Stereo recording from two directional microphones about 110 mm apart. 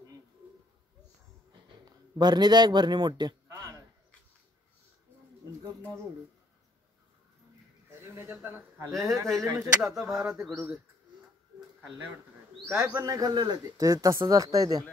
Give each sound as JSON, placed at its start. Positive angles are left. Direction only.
{"t": 1.9, "sound": "speech", "side_deg": -40}
{"t": 3.4, "sound": "a sound", "side_deg": -25}
{"t": 8.0, "sound": "speech", "side_deg": -25}
{"t": 9.9, "sound": "speech", "side_deg": -5}
{"t": 12.6, "sound": "speech", "side_deg": -20}
{"t": 13.0, "sound": "speech", "side_deg": -35}